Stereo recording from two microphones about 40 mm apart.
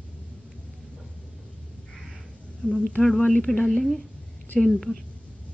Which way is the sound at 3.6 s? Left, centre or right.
Centre.